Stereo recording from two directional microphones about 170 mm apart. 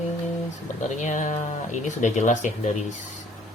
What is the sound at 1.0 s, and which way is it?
Speech, 45° left (ahead or behind).